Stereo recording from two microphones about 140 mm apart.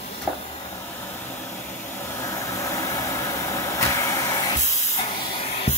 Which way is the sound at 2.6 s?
25° left (ahead or behind).